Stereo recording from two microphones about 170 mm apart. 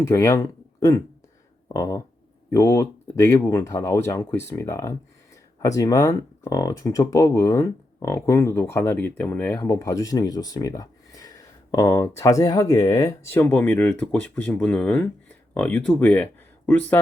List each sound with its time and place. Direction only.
0.0 s speech: 15° left (ahead or behind)